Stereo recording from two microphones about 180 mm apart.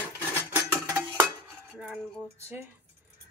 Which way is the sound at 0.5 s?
15° right (ahead or behind).